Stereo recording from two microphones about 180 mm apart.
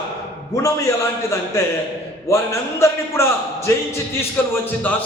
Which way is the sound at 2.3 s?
15° left (ahead or behind).